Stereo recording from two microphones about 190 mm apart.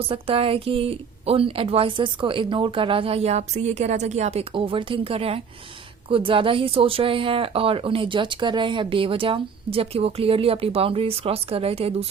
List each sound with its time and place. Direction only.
0.1 s speech: 30° right (ahead or behind)